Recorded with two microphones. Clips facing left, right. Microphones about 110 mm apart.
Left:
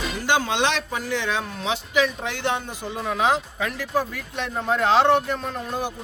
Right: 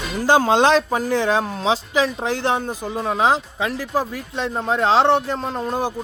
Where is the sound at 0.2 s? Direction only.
35° right (ahead or behind).